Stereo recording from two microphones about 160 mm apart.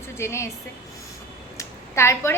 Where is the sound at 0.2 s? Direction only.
15° left (ahead or behind).